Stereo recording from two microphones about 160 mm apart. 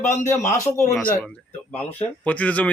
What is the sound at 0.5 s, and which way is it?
Speech, 15° left (ahead or behind).